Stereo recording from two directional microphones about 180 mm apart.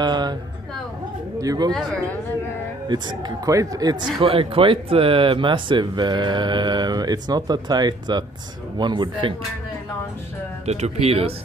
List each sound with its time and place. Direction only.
0.0 s speech: 25° right (ahead or behind)
1.4 s speech: 20° right (ahead or behind)
2.9 s speech: 25° right (ahead or behind)
4.2 s speech: 30° right (ahead or behind)
10.6 s speech: 35° right (ahead or behind)